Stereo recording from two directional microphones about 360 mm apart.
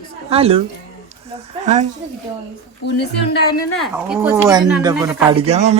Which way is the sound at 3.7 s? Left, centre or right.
Centre.